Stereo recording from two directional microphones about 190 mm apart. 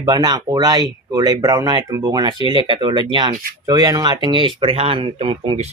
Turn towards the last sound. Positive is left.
turn(degrees=-30)  # may be behind; listen again after turning